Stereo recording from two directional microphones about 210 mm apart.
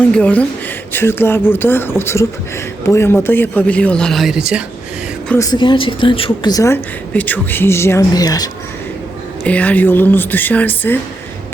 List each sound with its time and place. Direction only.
0.1 s speech: 5° left (ahead or behind)
5.3 s speech: 15° left (ahead or behind)
9.4 s speech: 5° left (ahead or behind)